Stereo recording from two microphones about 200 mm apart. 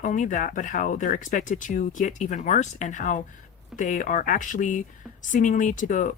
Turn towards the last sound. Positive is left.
turn(degrees=40)  # may be behind; listen again after turning